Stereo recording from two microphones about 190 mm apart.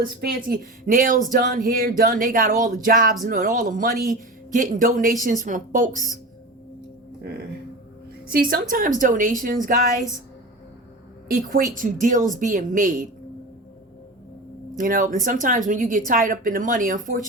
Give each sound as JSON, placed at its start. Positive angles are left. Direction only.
{"t": 0.2, "sound": "speech", "side_deg": -50}
{"t": 8.4, "sound": "speech", "side_deg": -50}
{"t": 11.8, "sound": "speech", "side_deg": -45}
{"t": 14.8, "sound": "speech", "side_deg": -45}